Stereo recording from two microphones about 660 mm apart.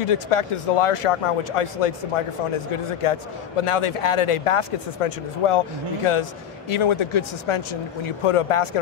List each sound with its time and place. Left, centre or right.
0.0 s a man's voice: left